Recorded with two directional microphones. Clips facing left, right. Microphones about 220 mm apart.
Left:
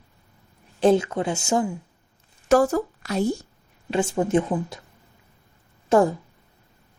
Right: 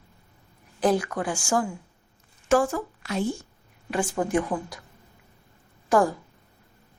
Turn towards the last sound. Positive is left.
turn(degrees=25)  # may be behind; listen again after turning